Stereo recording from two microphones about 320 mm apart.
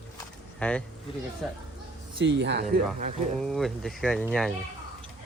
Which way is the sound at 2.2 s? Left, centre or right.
Right.